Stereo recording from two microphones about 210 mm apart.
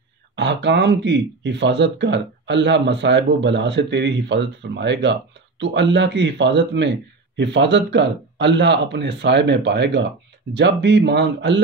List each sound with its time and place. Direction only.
0.4 s speech: 55° right (ahead or behind)